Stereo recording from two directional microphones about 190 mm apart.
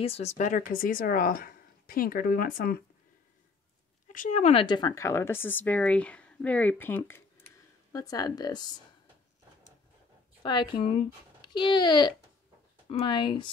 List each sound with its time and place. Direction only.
0.0 s speech: 35° left (ahead or behind); by 2.8 s 50° left (ahead or behind)
4.1 s speech: 40° left (ahead or behind); by 8.7 s 20° left (ahead or behind)
10.4 s speech: 25° left (ahead or behind)